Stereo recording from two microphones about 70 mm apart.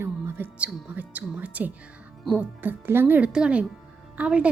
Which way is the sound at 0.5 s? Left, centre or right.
Right.